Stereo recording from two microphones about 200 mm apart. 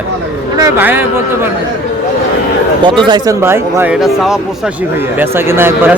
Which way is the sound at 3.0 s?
20° right (ahead or behind).